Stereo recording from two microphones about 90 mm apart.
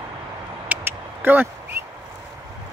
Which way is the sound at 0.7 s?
20° right (ahead or behind).